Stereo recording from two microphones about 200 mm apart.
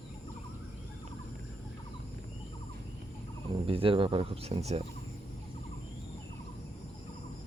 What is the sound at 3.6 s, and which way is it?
Speech, 25° right (ahead or behind).